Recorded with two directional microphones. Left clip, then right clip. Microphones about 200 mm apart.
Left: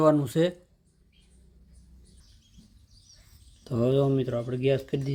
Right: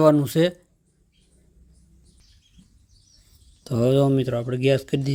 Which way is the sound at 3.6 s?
30° right (ahead or behind).